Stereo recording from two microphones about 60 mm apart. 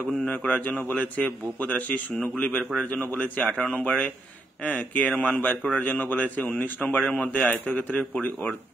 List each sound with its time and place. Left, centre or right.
0.3 s speech: left